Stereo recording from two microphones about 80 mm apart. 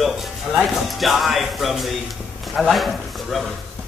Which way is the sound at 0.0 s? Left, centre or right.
Centre.